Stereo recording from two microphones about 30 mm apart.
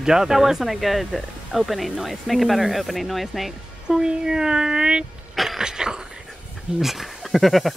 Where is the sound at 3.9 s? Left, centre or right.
Right.